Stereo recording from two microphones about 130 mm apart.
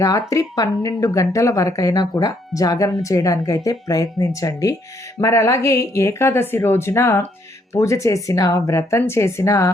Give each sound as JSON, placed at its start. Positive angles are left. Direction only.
{"t": 0.0, "sound": "speech", "side_deg": 25}